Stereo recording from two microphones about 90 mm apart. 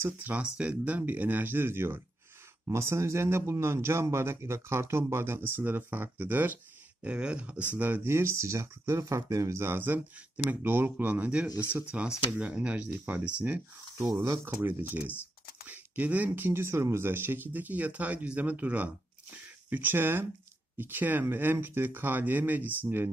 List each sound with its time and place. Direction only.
0.0 s a man's voice: 15° right (ahead or behind)
11.6 s speech: 30° left (ahead or behind)
12.3 s speech: 15° right (ahead or behind)
14.4 s a man's voice: 25° right (ahead or behind)
15.6 s a sound: 15° right (ahead or behind)
16.3 s a man's voice: 25° right (ahead or behind)